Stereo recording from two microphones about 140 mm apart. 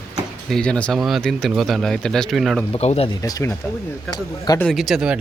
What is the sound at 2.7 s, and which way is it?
Speech, 50° left (ahead or behind).